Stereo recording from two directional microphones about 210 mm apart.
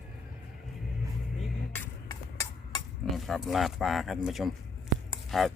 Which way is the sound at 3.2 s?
Centre (ahead or behind).